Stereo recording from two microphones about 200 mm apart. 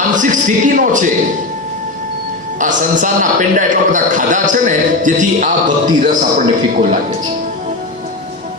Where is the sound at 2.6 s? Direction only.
40° right (ahead or behind).